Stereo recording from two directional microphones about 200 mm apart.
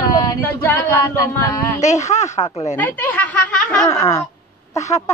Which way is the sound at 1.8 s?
35° left (ahead or behind).